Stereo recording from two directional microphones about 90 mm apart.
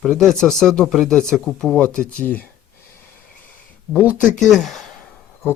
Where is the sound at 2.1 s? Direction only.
20° left (ahead or behind).